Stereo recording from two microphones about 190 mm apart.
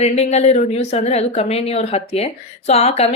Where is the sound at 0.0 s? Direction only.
35° left (ahead or behind).